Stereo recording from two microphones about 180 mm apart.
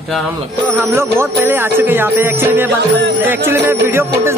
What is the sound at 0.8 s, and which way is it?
Music, 15° right (ahead or behind).